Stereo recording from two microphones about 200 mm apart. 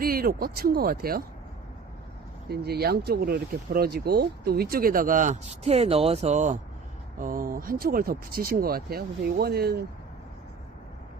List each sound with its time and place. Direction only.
0.0 s speech: 45° right (ahead or behind)
2.5 s speech: 55° right (ahead or behind)